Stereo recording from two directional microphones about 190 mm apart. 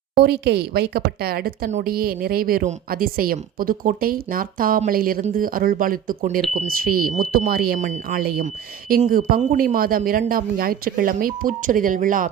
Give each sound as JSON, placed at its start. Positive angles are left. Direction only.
{"t": 0.2, "sound": "a woman's voice", "side_deg": -60}